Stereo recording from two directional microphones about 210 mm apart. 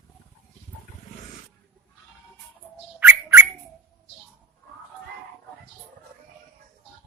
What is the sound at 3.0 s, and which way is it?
Bird, 10° right (ahead or behind).